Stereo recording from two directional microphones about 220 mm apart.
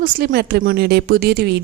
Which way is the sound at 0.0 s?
40° right (ahead or behind).